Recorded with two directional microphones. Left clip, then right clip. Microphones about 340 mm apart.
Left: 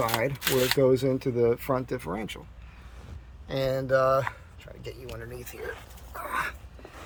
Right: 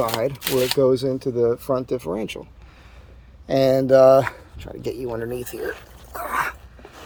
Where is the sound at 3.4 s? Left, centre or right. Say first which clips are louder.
Right 11 dB; right.